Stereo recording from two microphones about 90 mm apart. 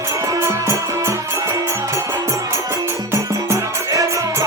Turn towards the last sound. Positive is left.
turn(degrees=-35)  # may be behind; listen again after turning